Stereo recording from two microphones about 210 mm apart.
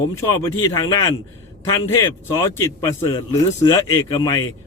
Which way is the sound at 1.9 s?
10° left (ahead or behind).